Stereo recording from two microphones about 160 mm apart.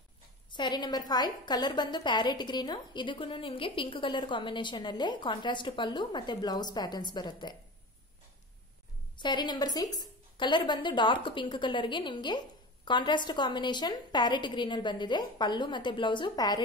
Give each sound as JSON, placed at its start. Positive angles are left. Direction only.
{"t": 0.5, "sound": "a woman's voice", "side_deg": 25}
{"t": 9.2, "sound": "a woman's voice", "side_deg": 25}